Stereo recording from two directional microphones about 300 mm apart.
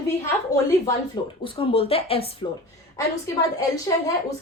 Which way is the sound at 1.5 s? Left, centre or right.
Centre.